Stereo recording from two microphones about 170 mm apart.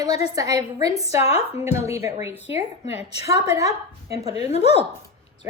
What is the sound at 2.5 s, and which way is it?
Speech, 35° left (ahead or behind).